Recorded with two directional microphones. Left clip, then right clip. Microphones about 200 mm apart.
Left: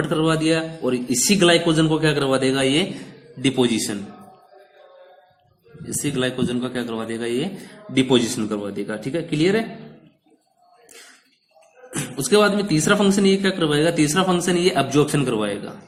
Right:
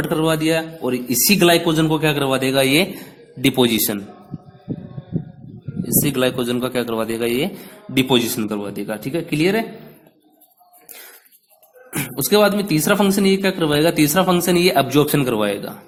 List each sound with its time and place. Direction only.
0.0 s a man's voice: 40° right (ahead or behind)
6.0 s a man's voice: 45° right (ahead or behind)
11.9 s a man's voice: 35° right (ahead or behind)